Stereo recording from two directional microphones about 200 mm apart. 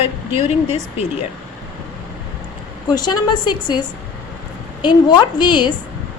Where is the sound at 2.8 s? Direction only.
20° left (ahead or behind).